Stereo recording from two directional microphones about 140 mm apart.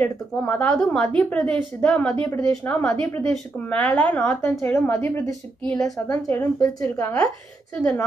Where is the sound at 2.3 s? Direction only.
25° left (ahead or behind).